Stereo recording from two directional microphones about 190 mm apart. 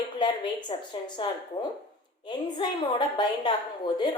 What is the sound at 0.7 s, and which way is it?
Speech, 25° left (ahead or behind).